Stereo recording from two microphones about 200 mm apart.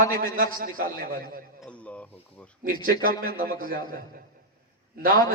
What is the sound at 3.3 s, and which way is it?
A man's voice, 45° right (ahead or behind).